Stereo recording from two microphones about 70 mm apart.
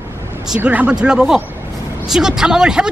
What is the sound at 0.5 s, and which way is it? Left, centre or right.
Speech, right.